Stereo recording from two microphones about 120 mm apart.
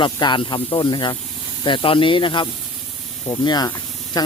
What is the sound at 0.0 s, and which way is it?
Speech, 40° left (ahead or behind).